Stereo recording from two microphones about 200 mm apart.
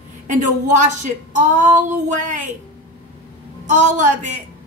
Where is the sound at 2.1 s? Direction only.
40° right (ahead or behind).